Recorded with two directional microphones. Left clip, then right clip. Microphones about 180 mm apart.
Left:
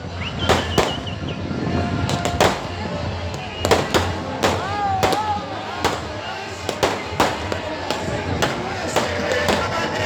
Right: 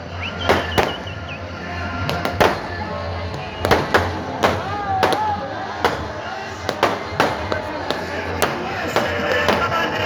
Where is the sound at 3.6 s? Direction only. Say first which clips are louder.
Right 1 dB; 30° right (ahead or behind).